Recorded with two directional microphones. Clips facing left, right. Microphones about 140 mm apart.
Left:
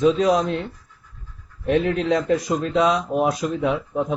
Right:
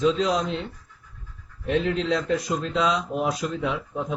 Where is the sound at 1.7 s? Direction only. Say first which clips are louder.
Left 4 dB; 55° left (ahead or behind).